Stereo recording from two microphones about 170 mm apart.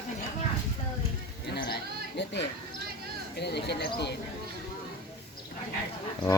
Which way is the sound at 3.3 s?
80° left.